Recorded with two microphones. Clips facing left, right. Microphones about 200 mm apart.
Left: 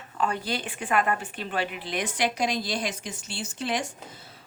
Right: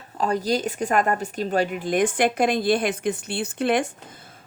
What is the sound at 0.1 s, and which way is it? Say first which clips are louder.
A woman's voice: right 6 dB; 40° right (ahead or behind).